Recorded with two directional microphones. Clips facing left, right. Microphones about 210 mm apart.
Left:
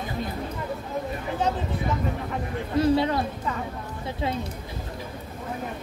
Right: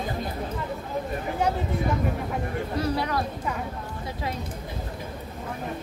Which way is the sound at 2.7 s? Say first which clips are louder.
Left 7 dB; 25° left (ahead or behind).